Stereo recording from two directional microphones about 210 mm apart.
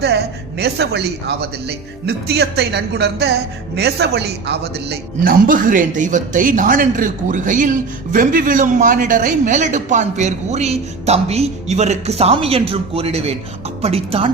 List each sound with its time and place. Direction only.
0.6 s a woman's voice: 50° right (ahead or behind); by 14.3 s 30° right (ahead or behind)